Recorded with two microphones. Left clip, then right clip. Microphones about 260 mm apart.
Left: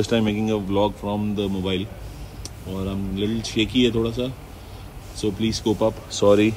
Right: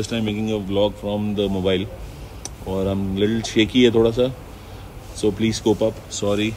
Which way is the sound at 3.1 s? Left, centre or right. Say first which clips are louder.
Right 3 dB; right.